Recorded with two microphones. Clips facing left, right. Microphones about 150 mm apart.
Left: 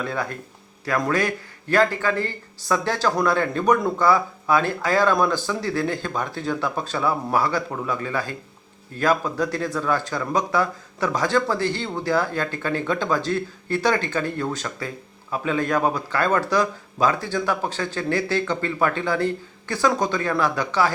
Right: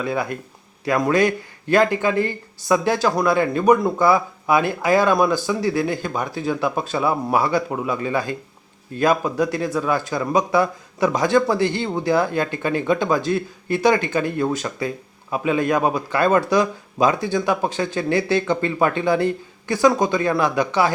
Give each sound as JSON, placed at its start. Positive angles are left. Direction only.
{"t": 0.0, "sound": "a man's voice", "side_deg": -10}